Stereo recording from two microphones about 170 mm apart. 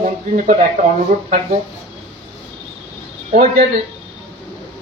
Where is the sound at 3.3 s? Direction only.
45° right (ahead or behind).